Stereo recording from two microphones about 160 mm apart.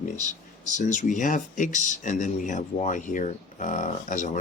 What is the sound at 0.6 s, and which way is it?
Speech, 50° left (ahead or behind).